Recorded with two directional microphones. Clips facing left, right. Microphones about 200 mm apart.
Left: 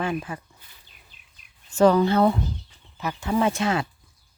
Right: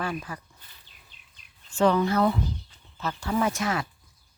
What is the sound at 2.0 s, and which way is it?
Speech, 30° left (ahead or behind).